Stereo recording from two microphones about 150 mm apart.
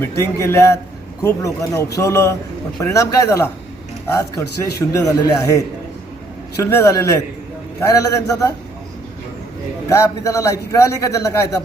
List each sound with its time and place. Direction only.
0.0 s a man's voice: 20° left (ahead or behind)
6.6 s a man's voice: 15° left (ahead or behind)
9.9 s a man's voice: 20° left (ahead or behind)